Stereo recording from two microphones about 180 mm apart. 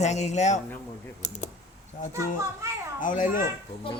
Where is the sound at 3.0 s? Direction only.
45° left (ahead or behind).